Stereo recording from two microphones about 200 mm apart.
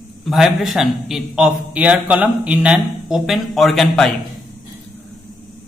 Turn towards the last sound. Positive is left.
turn(degrees=0)  # may be behind; listen again after turning